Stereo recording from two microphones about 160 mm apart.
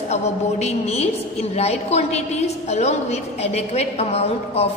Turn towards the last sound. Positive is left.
turn(degrees=40)  # may be behind; listen again after turning